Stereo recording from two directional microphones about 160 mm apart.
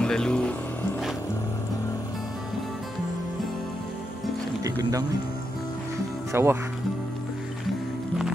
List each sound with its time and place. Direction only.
0.0 s speech: 5° left (ahead or behind)
6.3 s speech: 15° right (ahead or behind)